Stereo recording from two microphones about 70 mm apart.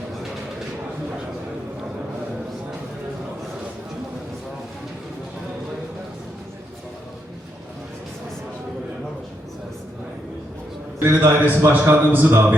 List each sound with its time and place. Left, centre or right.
11.0 s a man's voice: right